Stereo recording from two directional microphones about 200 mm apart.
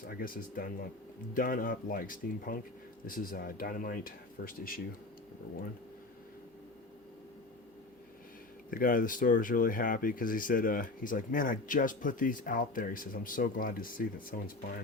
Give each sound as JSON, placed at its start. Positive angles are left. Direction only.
{"t": 0.1, "sound": "speech", "side_deg": 45}
{"t": 8.7, "sound": "speech", "side_deg": 45}